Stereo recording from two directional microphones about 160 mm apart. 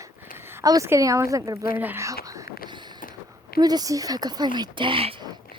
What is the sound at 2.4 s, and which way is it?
Vehicle, 70° left (ahead or behind).